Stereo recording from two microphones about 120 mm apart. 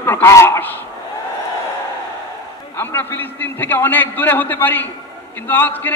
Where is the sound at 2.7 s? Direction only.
20° left (ahead or behind).